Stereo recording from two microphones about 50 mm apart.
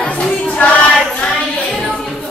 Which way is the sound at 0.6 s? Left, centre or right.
Left.